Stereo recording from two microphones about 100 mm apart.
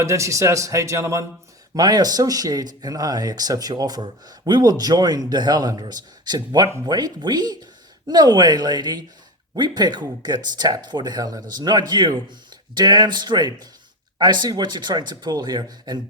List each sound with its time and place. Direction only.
0.0 s speech: 30° right (ahead or behind)
1.7 s speech: 40° right (ahead or behind)